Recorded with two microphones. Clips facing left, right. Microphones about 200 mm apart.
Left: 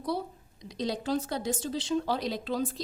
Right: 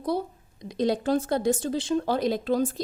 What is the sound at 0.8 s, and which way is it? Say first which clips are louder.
Speech: right 6 dB; 50° right (ahead or behind).